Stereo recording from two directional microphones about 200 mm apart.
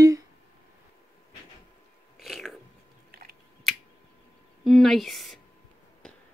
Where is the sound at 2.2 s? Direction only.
Centre (ahead or behind).